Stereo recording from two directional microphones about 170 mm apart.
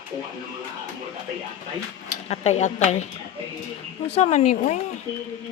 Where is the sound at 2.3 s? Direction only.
40° left (ahead or behind).